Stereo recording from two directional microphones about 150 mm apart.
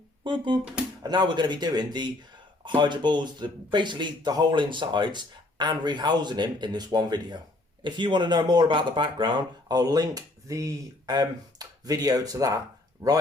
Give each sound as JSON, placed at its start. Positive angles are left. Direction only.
{"t": 0.3, "sound": "speech", "side_deg": -30}